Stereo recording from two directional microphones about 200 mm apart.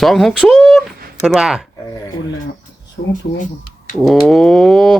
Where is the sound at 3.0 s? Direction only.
50° left (ahead or behind).